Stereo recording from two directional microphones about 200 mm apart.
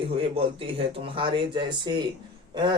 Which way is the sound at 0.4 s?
25° right (ahead or behind).